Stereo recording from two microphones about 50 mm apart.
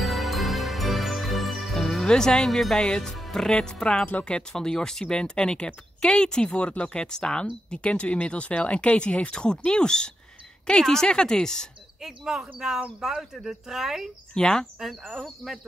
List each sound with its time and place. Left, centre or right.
0.0 s music: centre
2.0 s speech: centre
12.0 s speech: centre
14.3 s speech: centre